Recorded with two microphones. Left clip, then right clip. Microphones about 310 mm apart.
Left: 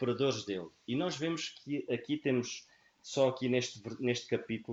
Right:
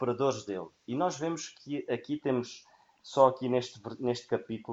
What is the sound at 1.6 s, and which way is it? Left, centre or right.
Speech, right.